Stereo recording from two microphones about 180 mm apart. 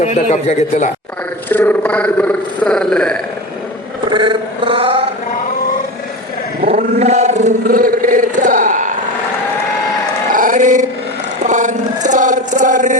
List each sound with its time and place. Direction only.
0.0 s a man's voice: 40° left (ahead or behind)
1.5 s speech: 10° left (ahead or behind)
4.1 s a sound: 25° right (ahead or behind)
6.7 s chant: 40° right (ahead or behind)
10.3 s dog: 45° right (ahead or behind)
11.4 s a sound: 45° right (ahead or behind)